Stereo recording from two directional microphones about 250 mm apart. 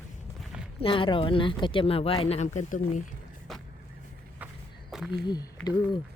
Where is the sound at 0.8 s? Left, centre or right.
Left.